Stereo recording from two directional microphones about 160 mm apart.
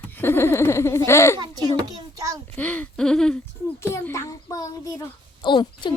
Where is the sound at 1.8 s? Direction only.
25° right (ahead or behind).